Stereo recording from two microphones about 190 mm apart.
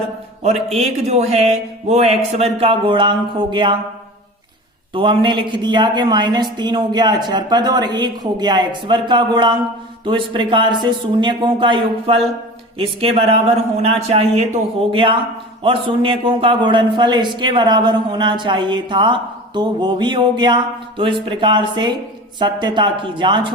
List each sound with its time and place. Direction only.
0.4 s speech: 35° right (ahead or behind)
4.9 s a man's voice: 25° right (ahead or behind)